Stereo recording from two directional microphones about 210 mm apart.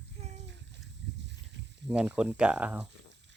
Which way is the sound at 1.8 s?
5° right (ahead or behind).